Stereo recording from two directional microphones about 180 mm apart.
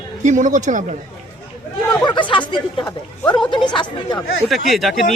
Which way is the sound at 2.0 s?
25° left (ahead or behind).